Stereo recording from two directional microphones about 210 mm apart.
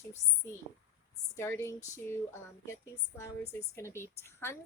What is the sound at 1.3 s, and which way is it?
Speech, 15° left (ahead or behind).